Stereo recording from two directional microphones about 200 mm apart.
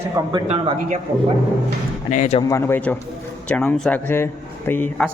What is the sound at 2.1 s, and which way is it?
Speech, 40° left (ahead or behind).